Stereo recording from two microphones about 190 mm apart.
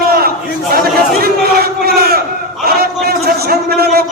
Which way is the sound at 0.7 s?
55° right (ahead or behind).